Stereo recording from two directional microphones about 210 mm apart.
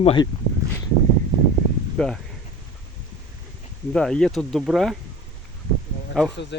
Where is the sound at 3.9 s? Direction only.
5° left (ahead or behind).